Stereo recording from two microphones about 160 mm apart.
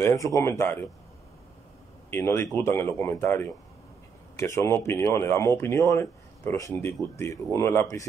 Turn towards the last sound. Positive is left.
turn(degrees=15)  # may be behind; listen again after turning